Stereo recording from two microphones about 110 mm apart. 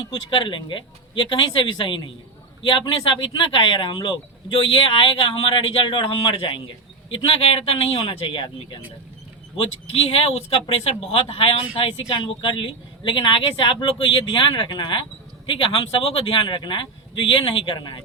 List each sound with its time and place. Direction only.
0.1 s a man's voice: 50° left (ahead or behind)